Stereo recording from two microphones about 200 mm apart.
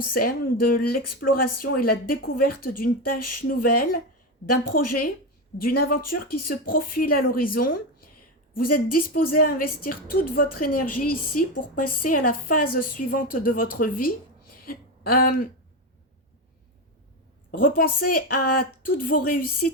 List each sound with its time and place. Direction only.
0.1 s a woman's voice: 45° left (ahead or behind)
17.5 s a woman's voice: 45° left (ahead or behind)